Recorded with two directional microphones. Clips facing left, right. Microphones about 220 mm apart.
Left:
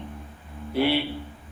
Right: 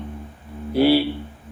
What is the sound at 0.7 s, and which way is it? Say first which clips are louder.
Speech: right 7 dB; 35° right (ahead or behind).